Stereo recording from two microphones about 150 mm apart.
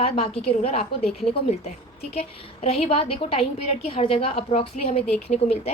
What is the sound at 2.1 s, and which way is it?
A woman's voice, 40° left (ahead or behind).